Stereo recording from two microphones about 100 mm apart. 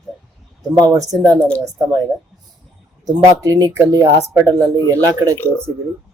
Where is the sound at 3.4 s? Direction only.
35° right (ahead or behind).